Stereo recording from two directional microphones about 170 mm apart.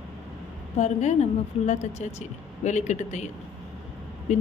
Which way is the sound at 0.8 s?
40° left (ahead or behind).